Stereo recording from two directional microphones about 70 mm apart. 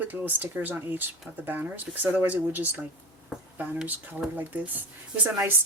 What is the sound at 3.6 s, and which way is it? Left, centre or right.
Speech, centre.